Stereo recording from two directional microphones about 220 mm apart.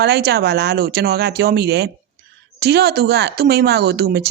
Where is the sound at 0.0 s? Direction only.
50° right (ahead or behind).